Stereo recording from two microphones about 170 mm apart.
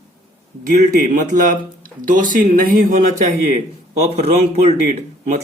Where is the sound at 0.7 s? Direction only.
50° right (ahead or behind).